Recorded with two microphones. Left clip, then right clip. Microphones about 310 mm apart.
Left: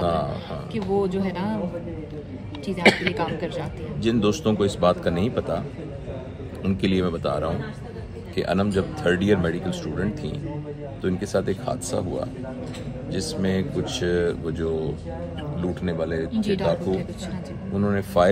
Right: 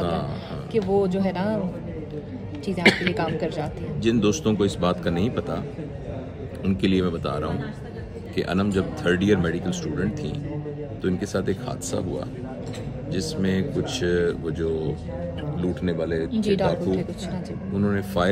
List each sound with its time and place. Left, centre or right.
0.0 s a sound: centre
1.0 s speech: centre
2.8 s speech: centre
3.2 s speech: centre
4.0 s speech: centre
6.6 s speech: centre
16.3 s speech: centre
17.7 s speech: centre